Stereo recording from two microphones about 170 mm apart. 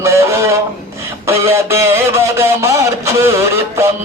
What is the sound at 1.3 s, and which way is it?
A man's voice, 15° right (ahead or behind).